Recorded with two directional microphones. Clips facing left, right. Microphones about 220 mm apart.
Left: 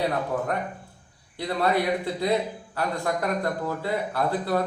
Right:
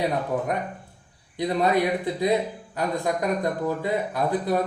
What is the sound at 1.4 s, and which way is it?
A man's voice, 15° right (ahead or behind).